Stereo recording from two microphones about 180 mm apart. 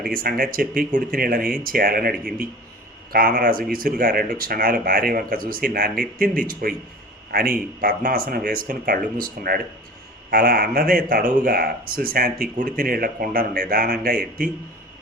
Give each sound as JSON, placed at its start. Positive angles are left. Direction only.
{"t": 0.0, "sound": "speech", "side_deg": -55}